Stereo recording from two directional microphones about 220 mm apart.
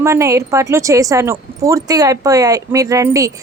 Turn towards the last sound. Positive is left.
turn(degrees=-15)  # may be behind; listen again after turning